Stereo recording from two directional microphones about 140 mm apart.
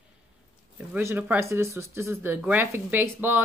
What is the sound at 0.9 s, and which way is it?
Speech, 15° right (ahead or behind).